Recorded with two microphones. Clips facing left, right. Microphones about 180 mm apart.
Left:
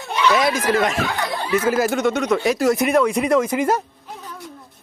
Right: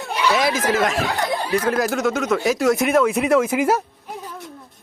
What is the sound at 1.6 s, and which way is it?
Speech, 5° left (ahead or behind).